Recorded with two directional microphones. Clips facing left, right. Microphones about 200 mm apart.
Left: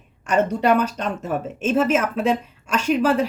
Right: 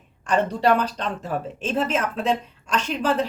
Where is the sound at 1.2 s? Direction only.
35° right (ahead or behind).